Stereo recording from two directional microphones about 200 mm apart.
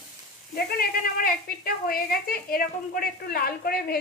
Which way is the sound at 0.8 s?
45° left (ahead or behind).